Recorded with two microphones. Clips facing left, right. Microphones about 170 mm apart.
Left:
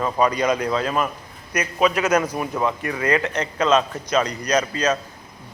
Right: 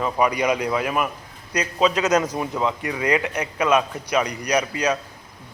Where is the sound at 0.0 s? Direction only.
15° right (ahead or behind).